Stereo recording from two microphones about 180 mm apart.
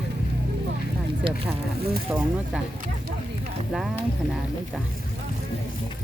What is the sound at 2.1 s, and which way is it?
Speech, 5° right (ahead or behind).